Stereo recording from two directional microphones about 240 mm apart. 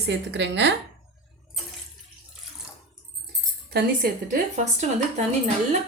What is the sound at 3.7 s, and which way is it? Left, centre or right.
A woman's voice, right.